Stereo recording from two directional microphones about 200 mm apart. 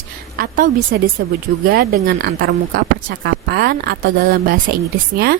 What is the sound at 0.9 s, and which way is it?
A woman's voice, 50° right (ahead or behind).